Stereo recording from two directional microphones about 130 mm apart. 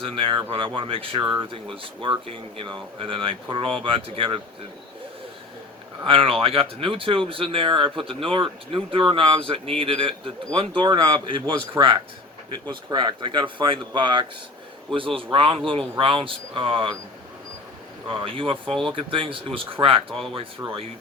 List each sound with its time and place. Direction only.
0.0 s speech: 40° right (ahead or behind)
6.1 s speech: 45° right (ahead or behind)
12.6 s speech: 35° right (ahead or behind)
18.1 s speech: 40° right (ahead or behind)
18.6 s speech: 5° left (ahead or behind)
18.9 s speech: 40° right (ahead or behind)